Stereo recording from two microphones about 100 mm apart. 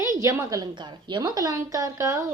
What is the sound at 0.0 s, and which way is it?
A woman's voice, 30° right (ahead or behind).